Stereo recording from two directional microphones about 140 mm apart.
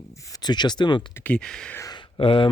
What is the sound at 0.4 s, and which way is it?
Speech, 30° left (ahead or behind).